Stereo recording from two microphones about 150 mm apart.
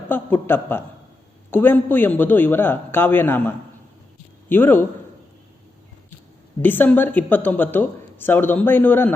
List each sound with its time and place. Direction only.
0.1 s a man's voice: 15° left (ahead or behind)
6.6 s speech: 15° left (ahead or behind)